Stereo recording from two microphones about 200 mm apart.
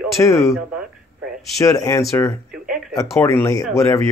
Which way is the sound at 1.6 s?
15° left (ahead or behind).